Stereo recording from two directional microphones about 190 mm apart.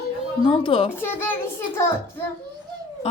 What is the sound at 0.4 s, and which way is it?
Speech, 30° left (ahead or behind).